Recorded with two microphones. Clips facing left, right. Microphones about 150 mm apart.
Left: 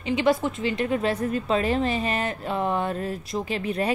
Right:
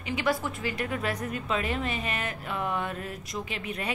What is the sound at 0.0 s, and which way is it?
A woman's voice, 25° left (ahead or behind).